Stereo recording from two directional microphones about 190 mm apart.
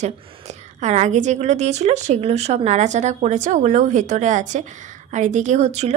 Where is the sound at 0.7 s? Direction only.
35° right (ahead or behind).